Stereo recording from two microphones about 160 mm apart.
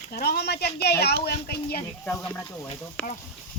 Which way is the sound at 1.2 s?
75° left (ahead or behind).